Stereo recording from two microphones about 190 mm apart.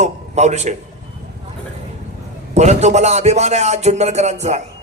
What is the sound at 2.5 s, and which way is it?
Speech, 35° right (ahead or behind).